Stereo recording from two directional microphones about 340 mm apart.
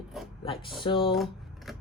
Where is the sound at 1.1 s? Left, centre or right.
Centre.